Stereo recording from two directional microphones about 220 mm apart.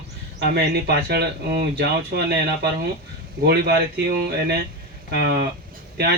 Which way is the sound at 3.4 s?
45° right (ahead or behind).